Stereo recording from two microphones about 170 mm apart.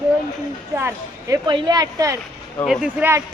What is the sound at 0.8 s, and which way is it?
Speech, 15° right (ahead or behind).